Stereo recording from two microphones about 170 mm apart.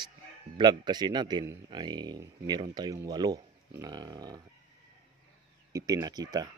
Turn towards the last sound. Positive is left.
turn(degrees=-25)  # may be behind; listen again after turning